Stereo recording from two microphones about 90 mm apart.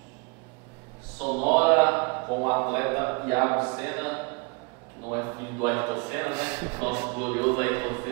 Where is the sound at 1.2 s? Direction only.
15° right (ahead or behind).